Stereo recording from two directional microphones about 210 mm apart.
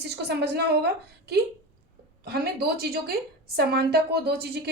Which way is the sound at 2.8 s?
50° right (ahead or behind).